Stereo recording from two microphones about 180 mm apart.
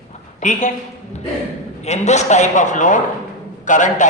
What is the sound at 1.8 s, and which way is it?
A man's voice, 40° left (ahead or behind).